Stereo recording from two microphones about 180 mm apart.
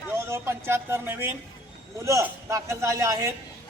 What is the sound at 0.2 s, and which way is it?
A man's voice, 15° right (ahead or behind).